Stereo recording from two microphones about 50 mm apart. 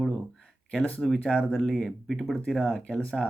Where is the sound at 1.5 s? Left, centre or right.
Centre.